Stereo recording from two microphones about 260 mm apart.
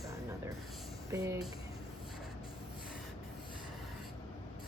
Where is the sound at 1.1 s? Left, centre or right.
Centre.